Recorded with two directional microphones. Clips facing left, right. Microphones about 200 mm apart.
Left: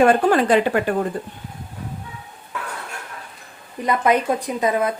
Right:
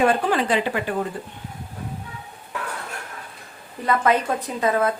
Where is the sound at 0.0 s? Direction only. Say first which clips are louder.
Left 5 dB; 50° left (ahead or behind).